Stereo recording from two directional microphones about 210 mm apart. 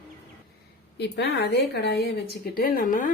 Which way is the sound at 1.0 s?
55° left (ahead or behind).